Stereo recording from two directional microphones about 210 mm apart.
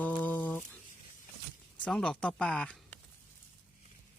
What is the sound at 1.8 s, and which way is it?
Speech, 5° left (ahead or behind).